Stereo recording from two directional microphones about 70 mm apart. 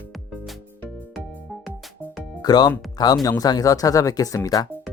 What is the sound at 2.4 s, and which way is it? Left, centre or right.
Speech, left.